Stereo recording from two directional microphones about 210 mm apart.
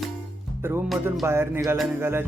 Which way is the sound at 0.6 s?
10° right (ahead or behind).